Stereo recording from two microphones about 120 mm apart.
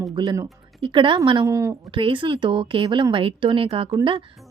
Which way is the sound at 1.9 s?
45° right (ahead or behind).